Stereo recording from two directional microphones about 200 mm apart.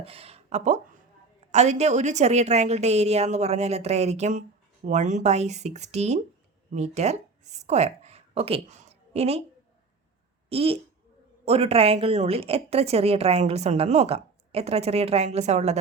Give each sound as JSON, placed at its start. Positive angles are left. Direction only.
{"t": 0.0, "sound": "a woman's voice", "side_deg": -30}
{"t": 10.5, "sound": "a woman's voice", "side_deg": -30}